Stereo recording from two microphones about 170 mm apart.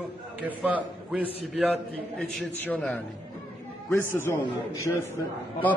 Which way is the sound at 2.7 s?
10° left (ahead or behind).